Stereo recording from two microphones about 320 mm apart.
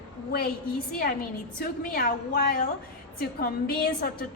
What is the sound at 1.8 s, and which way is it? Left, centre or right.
A woman's voice, left.